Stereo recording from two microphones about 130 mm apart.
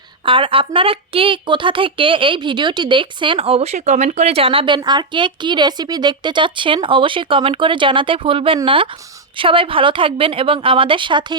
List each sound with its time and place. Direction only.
0.3 s a woman's voice: 40° right (ahead or behind)